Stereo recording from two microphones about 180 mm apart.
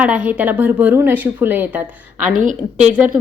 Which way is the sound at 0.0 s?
5° right (ahead or behind).